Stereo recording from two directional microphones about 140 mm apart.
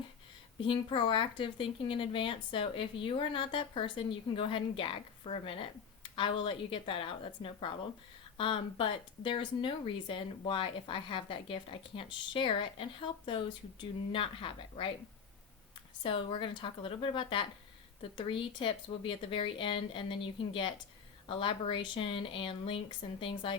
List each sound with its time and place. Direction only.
0.7 s speech: 40° left (ahead or behind)
16.0 s speech: 40° left (ahead or behind)